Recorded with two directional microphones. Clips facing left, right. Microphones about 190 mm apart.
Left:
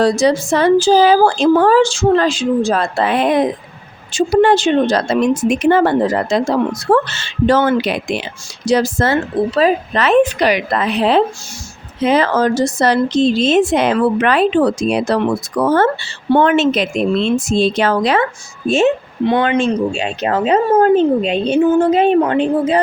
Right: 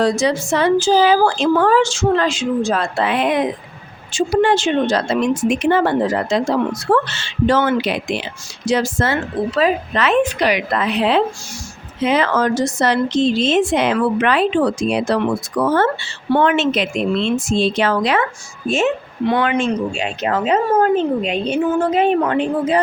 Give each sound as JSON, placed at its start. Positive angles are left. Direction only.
{"t": 0.0, "sound": "speech", "side_deg": 35}